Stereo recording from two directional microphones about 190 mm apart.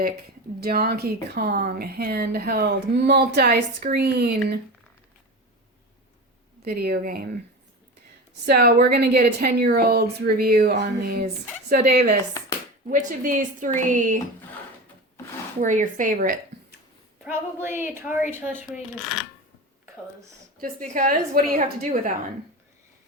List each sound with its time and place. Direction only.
0.6 s speech: 55° right (ahead or behind)
6.7 s speech: 55° right (ahead or behind)
8.4 s speech: 55° right (ahead or behind)
12.9 s speech: 45° right (ahead or behind)
15.6 s speech: 40° right (ahead or behind)
17.2 s a woman's voice: 10° right (ahead or behind)
20.6 s speech: 45° right (ahead or behind)